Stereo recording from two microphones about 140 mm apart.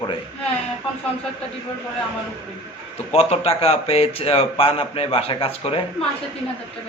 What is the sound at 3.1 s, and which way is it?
Speech, 45° left (ahead or behind).